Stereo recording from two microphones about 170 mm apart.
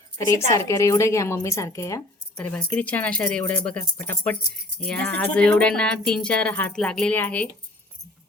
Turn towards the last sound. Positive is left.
turn(degrees=10)  # may be behind; listen again after turning